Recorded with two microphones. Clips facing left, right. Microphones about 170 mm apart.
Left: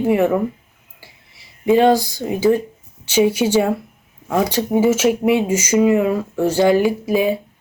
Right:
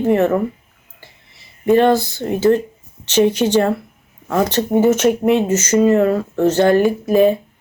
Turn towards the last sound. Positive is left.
turn(degrees=10)  # may be behind; listen again after turning